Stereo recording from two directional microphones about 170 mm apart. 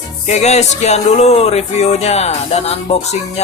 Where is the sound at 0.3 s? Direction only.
40° left (ahead or behind).